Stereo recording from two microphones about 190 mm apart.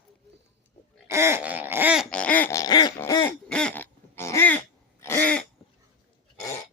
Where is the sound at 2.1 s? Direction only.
10° left (ahead or behind).